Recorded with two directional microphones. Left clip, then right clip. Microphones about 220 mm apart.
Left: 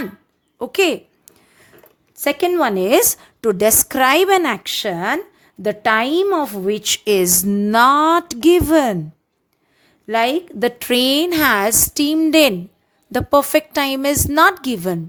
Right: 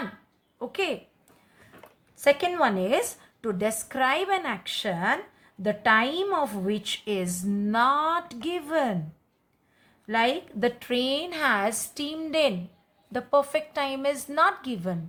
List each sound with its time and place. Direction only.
0.6 s a woman's voice: 55° left (ahead or behind)
2.2 s a woman's voice: 40° left (ahead or behind)
10.1 s a woman's voice: 45° left (ahead or behind)